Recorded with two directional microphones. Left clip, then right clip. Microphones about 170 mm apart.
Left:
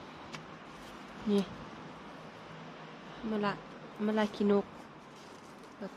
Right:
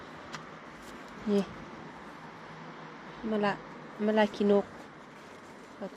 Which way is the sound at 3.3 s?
10° right (ahead or behind).